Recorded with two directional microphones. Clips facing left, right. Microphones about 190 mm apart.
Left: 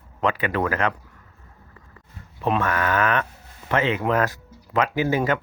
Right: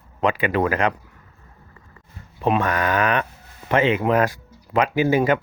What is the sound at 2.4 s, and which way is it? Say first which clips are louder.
Speech: right 2 dB; 15° right (ahead or behind).